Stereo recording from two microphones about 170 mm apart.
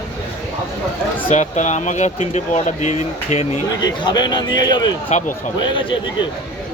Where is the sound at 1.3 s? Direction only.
45° left (ahead or behind).